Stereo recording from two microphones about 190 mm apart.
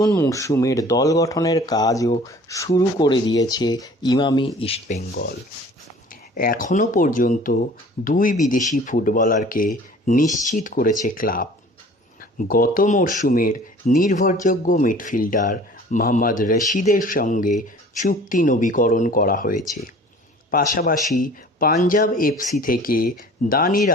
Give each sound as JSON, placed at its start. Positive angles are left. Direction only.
{"t": 0.0, "sound": "speech", "side_deg": 15}
{"t": 5.1, "sound": "speech", "side_deg": 55}